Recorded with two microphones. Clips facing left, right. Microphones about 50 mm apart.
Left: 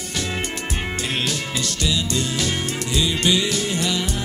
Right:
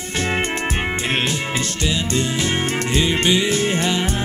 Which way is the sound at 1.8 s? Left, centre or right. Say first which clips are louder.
Right 1 dB; right.